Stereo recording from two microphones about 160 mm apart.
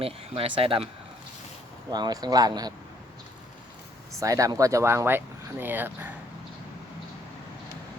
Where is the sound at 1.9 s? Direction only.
25° right (ahead or behind).